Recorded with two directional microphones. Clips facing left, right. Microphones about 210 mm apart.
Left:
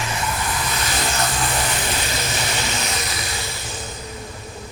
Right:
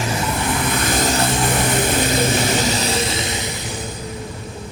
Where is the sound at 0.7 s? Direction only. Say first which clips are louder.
Right 6 dB; 50° right (ahead or behind).